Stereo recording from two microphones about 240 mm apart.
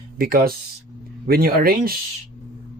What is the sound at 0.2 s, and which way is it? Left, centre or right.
Speech, right.